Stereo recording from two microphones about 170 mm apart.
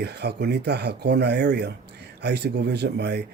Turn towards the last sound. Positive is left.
turn(degrees=-80)